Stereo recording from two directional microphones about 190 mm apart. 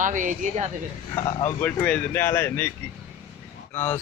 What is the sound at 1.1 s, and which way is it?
Speech, 15° left (ahead or behind).